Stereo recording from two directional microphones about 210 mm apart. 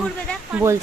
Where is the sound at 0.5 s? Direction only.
15° right (ahead or behind).